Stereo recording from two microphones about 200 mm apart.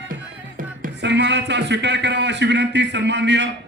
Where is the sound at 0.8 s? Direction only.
60° right (ahead or behind).